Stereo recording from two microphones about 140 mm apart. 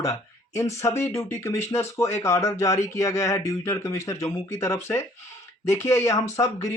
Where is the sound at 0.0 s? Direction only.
20° left (ahead or behind).